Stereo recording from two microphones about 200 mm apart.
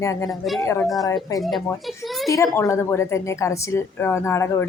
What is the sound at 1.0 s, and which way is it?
Speech, 15° left (ahead or behind).